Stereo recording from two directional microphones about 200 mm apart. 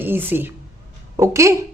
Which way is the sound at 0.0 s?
10° right (ahead or behind).